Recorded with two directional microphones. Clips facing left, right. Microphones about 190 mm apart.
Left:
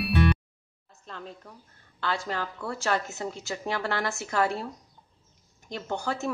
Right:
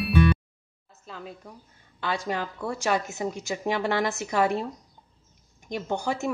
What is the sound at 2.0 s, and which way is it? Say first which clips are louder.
Speech: right 2 dB; 15° right (ahead or behind).